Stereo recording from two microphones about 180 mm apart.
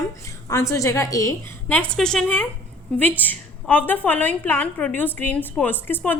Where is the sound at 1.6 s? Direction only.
5° left (ahead or behind).